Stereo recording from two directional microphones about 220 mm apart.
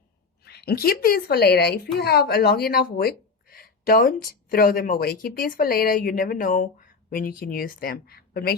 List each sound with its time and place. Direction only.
0.4 s speech: 45° left (ahead or behind)